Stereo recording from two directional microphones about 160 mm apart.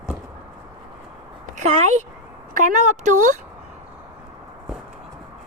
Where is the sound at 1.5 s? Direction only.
50° right (ahead or behind).